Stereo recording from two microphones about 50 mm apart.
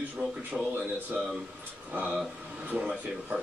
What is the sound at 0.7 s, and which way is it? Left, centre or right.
A woman's voice, right.